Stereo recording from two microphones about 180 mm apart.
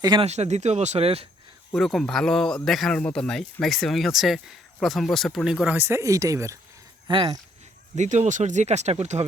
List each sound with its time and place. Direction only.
0.0 s speech: 25° right (ahead or behind)
0.3 s speech: 40° right (ahead or behind)
1.7 s speech: centre (ahead or behind); by 6.6 s 15° right (ahead or behind)
7.1 s speech: 30° right (ahead or behind)
7.9 s speech: 40° right (ahead or behind)